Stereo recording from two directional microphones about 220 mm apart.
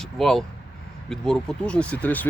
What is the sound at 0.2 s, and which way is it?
Speech, centre (ahead or behind).